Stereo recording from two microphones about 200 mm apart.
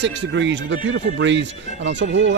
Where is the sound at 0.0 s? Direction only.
65° right (ahead or behind).